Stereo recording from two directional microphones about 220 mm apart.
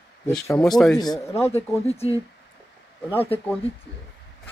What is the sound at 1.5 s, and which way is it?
Speech, 25° left (ahead or behind).